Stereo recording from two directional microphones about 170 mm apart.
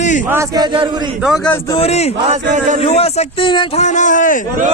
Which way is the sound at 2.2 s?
45° right (ahead or behind).